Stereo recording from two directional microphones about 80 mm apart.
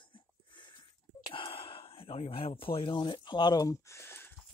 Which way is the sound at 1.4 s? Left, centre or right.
Left.